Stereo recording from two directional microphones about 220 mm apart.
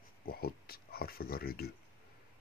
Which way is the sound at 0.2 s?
45° left (ahead or behind).